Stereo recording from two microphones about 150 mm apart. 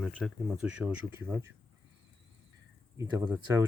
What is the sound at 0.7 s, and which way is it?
Speech, 10° right (ahead or behind).